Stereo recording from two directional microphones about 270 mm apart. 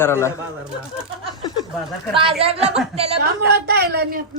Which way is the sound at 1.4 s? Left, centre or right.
Centre.